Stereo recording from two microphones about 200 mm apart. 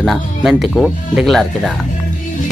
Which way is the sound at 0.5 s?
Centre (ahead or behind).